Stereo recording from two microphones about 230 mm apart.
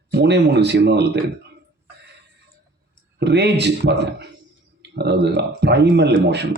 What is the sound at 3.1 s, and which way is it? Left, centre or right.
Speech, right.